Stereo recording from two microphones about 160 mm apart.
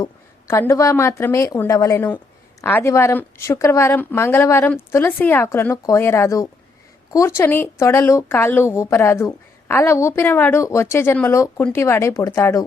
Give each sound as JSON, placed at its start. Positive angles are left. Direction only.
{"t": 0.0, "sound": "speech", "side_deg": 15}